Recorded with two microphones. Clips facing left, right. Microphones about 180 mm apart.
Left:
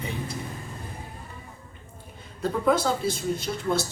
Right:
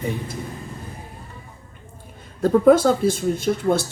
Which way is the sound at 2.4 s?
50° right (ahead or behind).